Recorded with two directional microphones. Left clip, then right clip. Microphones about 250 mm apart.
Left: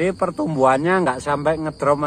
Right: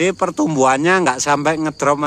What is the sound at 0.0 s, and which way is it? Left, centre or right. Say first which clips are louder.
Speech: right 4 dB; right.